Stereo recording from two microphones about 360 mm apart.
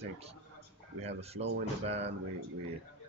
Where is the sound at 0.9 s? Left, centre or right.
Centre.